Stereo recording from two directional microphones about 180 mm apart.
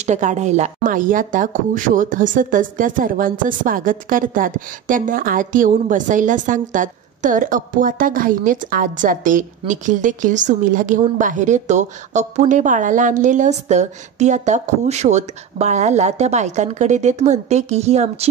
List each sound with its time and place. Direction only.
0.0 s speech: 40° right (ahead or behind)